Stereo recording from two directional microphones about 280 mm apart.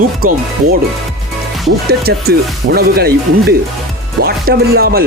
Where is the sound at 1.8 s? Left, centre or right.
Right.